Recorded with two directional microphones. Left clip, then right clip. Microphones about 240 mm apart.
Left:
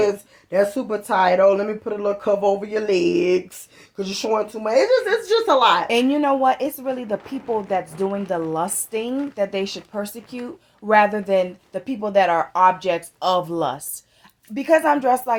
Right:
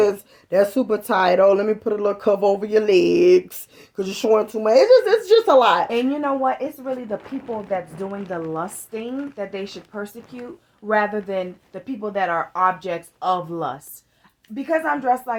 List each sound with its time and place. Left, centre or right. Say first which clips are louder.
0.0 s speech: right 1 dB; right
5.9 s speech: left 3 dB; left